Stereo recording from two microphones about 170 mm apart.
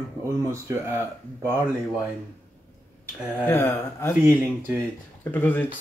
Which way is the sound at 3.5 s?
15° left (ahead or behind).